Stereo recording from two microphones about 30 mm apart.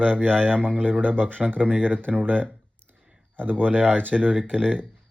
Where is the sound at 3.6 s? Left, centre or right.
Right.